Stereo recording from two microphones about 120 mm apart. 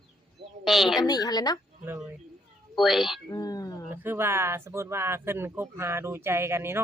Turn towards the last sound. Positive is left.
turn(degrees=-20)  # may be behind; listen again after turning